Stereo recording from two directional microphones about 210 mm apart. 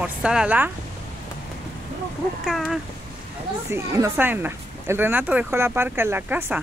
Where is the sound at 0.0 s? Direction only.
5° right (ahead or behind).